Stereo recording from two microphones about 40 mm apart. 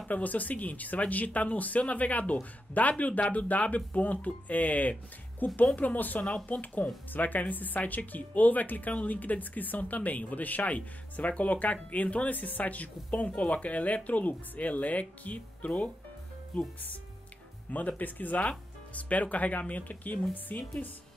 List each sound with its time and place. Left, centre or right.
0.1 s speech: left
17.7 s speech: left